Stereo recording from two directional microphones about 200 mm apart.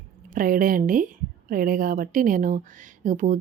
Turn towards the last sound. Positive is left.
turn(degrees=-40)  # may be behind; listen again after turning